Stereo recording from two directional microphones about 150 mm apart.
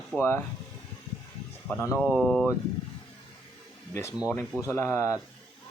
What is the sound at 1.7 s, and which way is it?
Speech, 15° left (ahead or behind).